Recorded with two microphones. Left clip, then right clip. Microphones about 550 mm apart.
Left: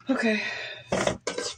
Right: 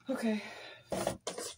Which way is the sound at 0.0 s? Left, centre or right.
Right.